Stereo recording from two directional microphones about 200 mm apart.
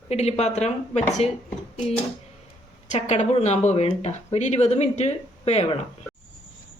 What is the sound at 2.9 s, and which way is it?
Speech, 35° left (ahead or behind).